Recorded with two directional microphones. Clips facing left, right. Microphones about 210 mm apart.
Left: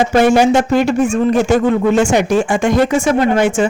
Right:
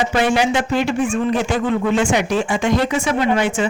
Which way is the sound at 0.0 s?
45° left (ahead or behind).